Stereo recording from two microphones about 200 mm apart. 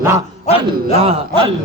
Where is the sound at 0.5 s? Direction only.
25° right (ahead or behind).